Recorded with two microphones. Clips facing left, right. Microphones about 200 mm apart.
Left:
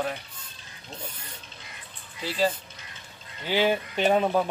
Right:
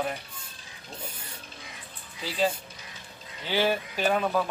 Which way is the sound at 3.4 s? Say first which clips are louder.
Left 2 dB; 15° left (ahead or behind).